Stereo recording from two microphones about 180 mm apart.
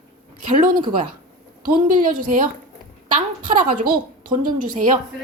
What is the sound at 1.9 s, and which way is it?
Speech, 50° right (ahead or behind).